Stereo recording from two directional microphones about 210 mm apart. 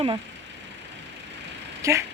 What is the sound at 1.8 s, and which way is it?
Vehicle, 15° right (ahead or behind).